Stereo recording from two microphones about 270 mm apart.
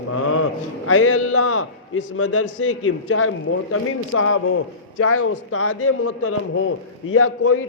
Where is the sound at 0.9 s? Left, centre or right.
Left.